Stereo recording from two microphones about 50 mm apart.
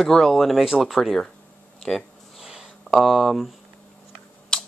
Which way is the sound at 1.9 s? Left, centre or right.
Centre.